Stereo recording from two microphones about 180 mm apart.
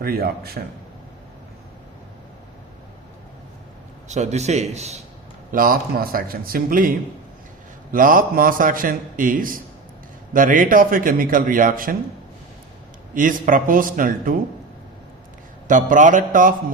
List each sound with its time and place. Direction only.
0.0 s a man's voice: 55° right (ahead or behind)
4.1 s a man's voice: 40° right (ahead or behind)
5.5 s a man's voice: 50° right (ahead or behind)
7.9 s a man's voice: 50° right (ahead or behind)
13.1 s a man's voice: 45° right (ahead or behind)
15.6 s a man's voice: 45° right (ahead or behind)